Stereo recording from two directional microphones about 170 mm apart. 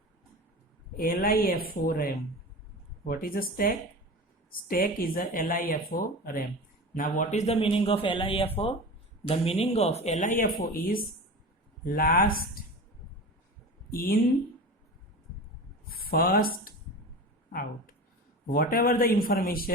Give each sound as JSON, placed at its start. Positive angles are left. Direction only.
{"t": 0.9, "sound": "speech", "side_deg": 60}
{"t": 13.9, "sound": "speech", "side_deg": 60}
{"t": 15.9, "sound": "speech", "side_deg": 60}
{"t": 18.5, "sound": "speech", "side_deg": 60}